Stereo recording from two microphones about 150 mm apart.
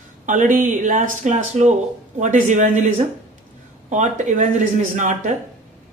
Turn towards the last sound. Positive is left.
turn(degrees=-55)  # may be behind; listen again after turning